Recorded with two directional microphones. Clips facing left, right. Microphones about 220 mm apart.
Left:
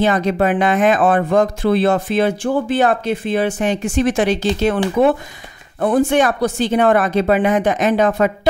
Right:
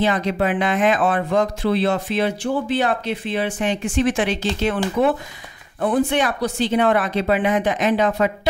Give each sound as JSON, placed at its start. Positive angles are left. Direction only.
{"t": 0.0, "sound": "speech", "side_deg": 45}